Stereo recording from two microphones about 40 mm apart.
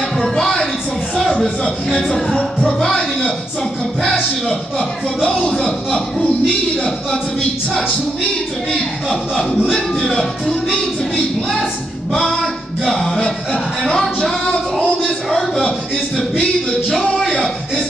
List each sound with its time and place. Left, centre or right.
0.2 s a woman's voice: centre
1.3 s music: centre
9.1 s music: centre
14.2 s a sound: centre
15.2 s music: centre
17.2 s a sound: centre